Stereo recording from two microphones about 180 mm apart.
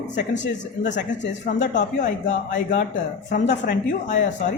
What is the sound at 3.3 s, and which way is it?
Speech, 45° left (ahead or behind).